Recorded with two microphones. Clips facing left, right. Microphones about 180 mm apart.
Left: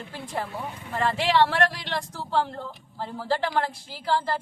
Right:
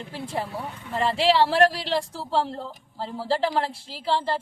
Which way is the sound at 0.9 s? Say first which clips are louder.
Right 2 dB; 30° right (ahead or behind).